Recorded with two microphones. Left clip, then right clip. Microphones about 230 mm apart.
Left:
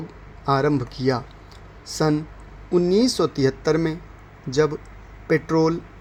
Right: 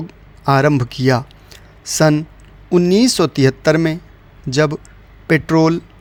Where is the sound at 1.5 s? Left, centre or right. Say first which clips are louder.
Right 10 dB; right.